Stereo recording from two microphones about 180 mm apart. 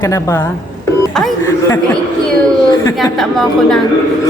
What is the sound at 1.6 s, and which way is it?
Speech, 15° left (ahead or behind).